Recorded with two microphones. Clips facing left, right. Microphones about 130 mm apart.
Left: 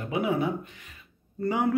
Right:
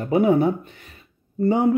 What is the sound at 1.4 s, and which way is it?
Speech, 25° right (ahead or behind).